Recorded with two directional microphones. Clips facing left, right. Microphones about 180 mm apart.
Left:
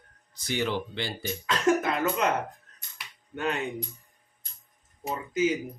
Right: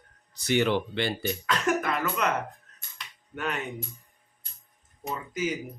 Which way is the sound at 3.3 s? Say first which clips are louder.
Left 3 dB; 25° left (ahead or behind).